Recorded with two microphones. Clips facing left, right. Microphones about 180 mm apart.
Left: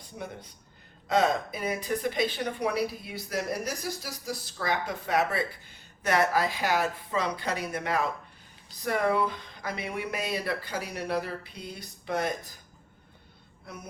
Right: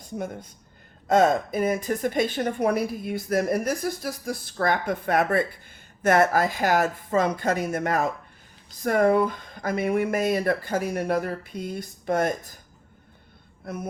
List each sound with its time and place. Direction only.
0.0 s speech: 45° right (ahead or behind)